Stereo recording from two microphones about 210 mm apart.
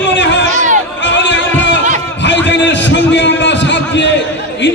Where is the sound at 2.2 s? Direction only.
60° left (ahead or behind).